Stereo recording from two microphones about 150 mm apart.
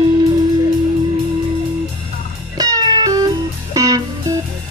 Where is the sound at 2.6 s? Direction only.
25° right (ahead or behind).